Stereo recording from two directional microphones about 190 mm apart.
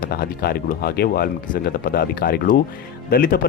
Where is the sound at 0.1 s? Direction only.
55° left (ahead or behind).